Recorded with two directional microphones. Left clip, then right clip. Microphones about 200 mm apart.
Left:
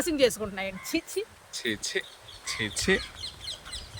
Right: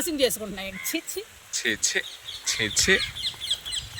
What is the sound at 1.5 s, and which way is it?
Speech, 5° left (ahead or behind).